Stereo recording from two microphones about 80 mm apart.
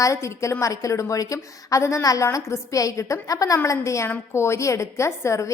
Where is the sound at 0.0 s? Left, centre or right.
Left.